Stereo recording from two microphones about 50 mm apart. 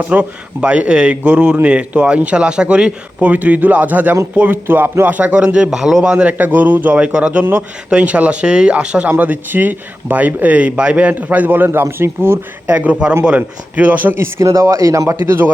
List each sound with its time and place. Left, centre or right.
0.1 s a man's voice: right
5.2 s speech: right
6.1 s a man's voice: right
7.0 s speech: right
9.0 s a man's voice: right
11.1 s a man's voice: right
12.6 s a man's voice: right
14.2 s speech: right
15.2 s a man's voice: right